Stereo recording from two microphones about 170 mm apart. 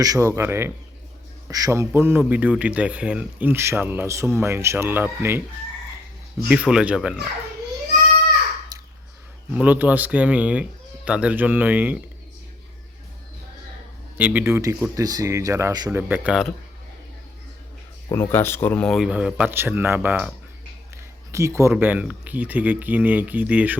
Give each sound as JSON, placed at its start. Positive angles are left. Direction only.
{"t": 0.0, "sound": "a man's voice", "side_deg": -20}
{"t": 6.5, "sound": "speech", "side_deg": -5}
{"t": 8.7, "sound": "a sound", "side_deg": -20}
{"t": 9.6, "sound": "a man's voice", "side_deg": -10}
{"t": 14.2, "sound": "a man's voice", "side_deg": -10}
{"t": 16.0, "sound": "a man's voice", "side_deg": -10}
{"t": 18.1, "sound": "speech", "side_deg": 15}
{"t": 21.3, "sound": "a man's voice", "side_deg": -15}